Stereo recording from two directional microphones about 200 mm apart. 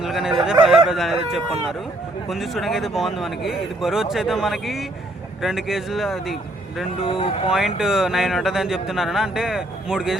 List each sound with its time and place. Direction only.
0.0 s speech: centre (ahead or behind)
7.1 s speech: 25° left (ahead or behind)
7.5 s speech: centre (ahead or behind)